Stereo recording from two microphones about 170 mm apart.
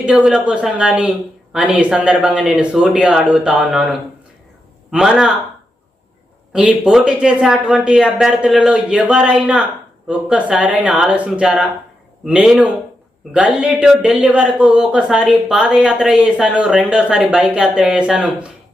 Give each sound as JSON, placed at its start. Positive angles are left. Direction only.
{"t": 0.0, "sound": "speech", "side_deg": -5}
{"t": 6.5, "sound": "speech", "side_deg": -5}